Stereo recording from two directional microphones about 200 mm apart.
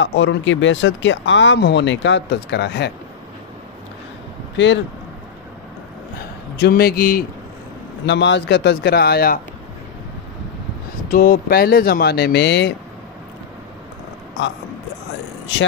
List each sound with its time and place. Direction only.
0.0 s speech: 65° left (ahead or behind)
6.5 s speech: 55° left (ahead or behind)
8.0 s speech: 60° left (ahead or behind)
11.1 s speech: 45° left (ahead or behind)